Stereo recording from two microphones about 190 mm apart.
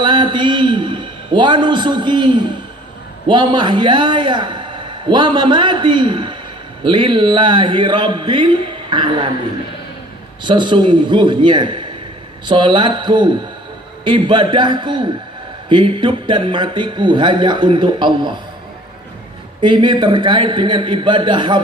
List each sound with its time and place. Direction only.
0.0 s a sound: 25° right (ahead or behind)
3.2 s speech: 25° right (ahead or behind)
10.4 s speech: 25° right (ahead or behind)
19.6 s speech: 25° right (ahead or behind)